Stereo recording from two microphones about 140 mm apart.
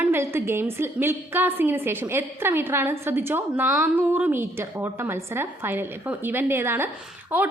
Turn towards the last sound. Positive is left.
turn(degrees=-10)  # may be behind; listen again after turning